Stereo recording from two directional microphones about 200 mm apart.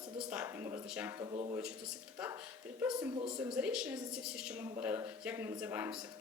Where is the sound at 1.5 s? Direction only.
5° right (ahead or behind).